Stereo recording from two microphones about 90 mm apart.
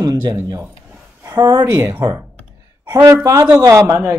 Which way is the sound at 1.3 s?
45° right (ahead or behind).